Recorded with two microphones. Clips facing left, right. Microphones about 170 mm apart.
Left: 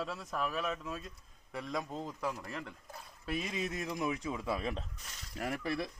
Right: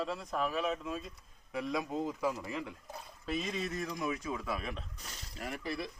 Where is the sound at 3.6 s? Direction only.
20° left (ahead or behind).